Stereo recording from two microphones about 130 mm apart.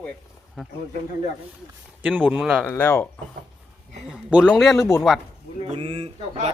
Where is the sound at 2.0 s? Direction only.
10° right (ahead or behind).